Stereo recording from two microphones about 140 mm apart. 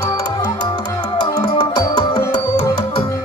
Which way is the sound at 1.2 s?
30° left (ahead or behind).